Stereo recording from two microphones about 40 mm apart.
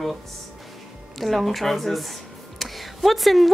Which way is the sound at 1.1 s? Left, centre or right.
Centre.